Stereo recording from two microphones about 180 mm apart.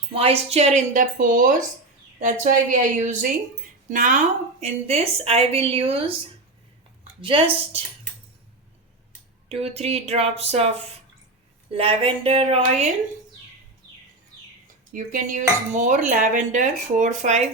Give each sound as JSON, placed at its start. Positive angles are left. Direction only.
{"t": 0.1, "sound": "a woman's voice", "side_deg": -35}
{"t": 7.2, "sound": "a woman's voice", "side_deg": -30}
{"t": 9.5, "sound": "a woman's voice", "side_deg": -35}
{"t": 14.9, "sound": "dishes", "side_deg": -45}